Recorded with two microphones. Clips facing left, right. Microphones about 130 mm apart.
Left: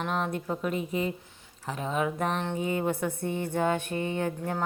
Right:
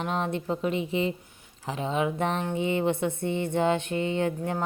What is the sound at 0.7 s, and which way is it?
Speech, 90° right.